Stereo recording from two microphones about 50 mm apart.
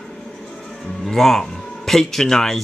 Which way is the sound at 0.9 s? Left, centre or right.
Centre.